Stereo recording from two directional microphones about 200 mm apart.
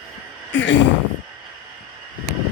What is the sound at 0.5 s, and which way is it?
Speech, 65° left (ahead or behind).